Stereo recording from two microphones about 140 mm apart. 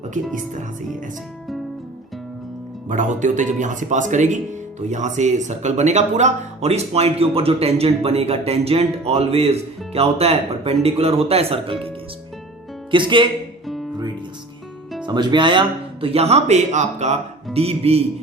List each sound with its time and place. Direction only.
2.9 s speech: 60° right (ahead or behind); by 13.2 s 35° right (ahead or behind)
15.0 s speech: 30° right (ahead or behind)